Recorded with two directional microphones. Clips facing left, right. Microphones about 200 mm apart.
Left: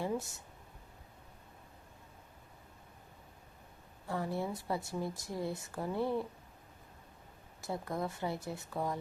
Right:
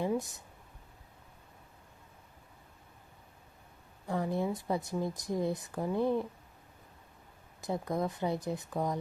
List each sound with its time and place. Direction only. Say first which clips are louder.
0.0 s a sound: right 4 dB; 15° right (ahead or behind)
4.1 s speech: right 4 dB; 20° right (ahead or behind)
7.6 s speech: right 4 dB; 20° right (ahead or behind)